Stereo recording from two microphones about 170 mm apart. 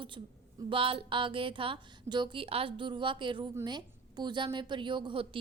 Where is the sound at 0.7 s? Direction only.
30° right (ahead or behind).